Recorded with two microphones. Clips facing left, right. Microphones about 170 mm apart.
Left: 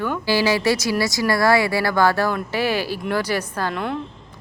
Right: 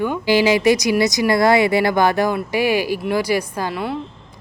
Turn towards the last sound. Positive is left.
turn(degrees=-5)  # may be behind; listen again after turning